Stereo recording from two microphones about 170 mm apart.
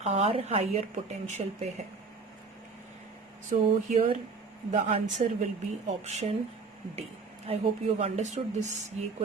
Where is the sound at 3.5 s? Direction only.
40° right (ahead or behind).